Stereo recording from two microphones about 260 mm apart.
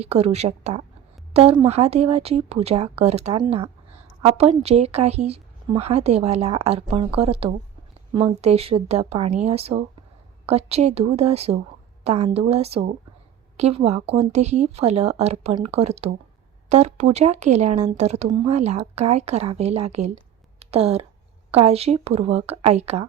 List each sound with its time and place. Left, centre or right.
0.0 s speech: right